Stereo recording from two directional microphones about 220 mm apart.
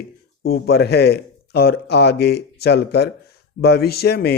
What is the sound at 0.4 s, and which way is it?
Speech, 45° left (ahead or behind).